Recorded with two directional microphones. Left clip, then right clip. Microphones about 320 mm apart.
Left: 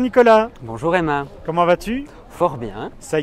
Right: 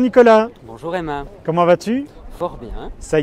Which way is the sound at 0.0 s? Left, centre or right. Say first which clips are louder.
Right 2 dB; centre.